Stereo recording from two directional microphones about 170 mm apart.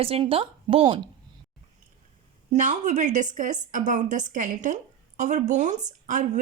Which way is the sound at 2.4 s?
45° right (ahead or behind).